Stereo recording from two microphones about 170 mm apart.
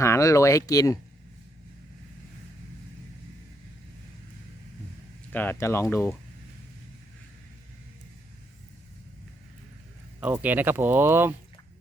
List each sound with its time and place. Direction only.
0.0 s speech: 20° left (ahead or behind)
5.3 s speech: 10° left (ahead or behind)
10.2 s speech: 10° right (ahead or behind)